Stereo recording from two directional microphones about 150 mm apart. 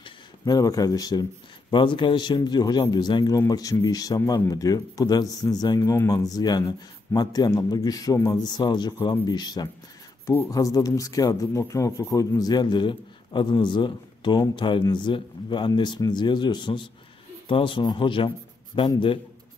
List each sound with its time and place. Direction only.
0.0 s a man's voice: 25° left (ahead or behind)